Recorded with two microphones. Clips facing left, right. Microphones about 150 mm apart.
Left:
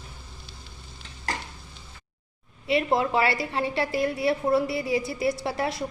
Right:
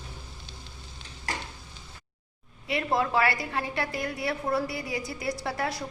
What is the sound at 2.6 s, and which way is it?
A woman's voice, 25° left (ahead or behind).